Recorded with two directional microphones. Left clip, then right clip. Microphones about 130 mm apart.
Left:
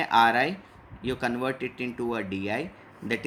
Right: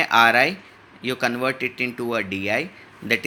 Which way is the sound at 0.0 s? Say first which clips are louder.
Right 5 dB; 20° right (ahead or behind).